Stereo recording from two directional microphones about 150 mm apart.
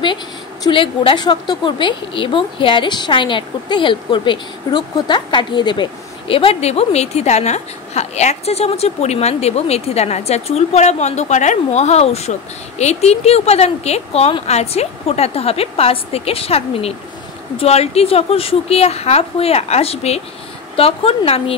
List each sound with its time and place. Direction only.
0.7 s a woman's voice: 35° left (ahead or behind)